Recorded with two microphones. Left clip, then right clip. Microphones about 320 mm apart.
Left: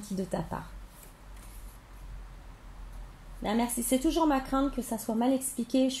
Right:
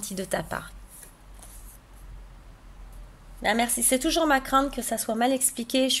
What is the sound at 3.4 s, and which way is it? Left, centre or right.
Speech, right.